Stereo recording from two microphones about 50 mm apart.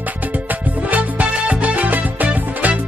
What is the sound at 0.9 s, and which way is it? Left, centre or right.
Music, right.